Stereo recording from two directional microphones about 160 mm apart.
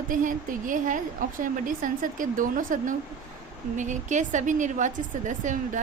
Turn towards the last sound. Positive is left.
turn(degrees=-50)  # may be behind; listen again after turning